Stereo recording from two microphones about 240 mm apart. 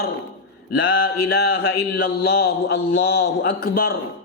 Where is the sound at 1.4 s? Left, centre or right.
Left.